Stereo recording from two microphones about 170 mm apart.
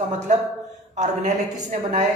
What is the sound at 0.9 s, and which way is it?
Speech, 45° right (ahead or behind).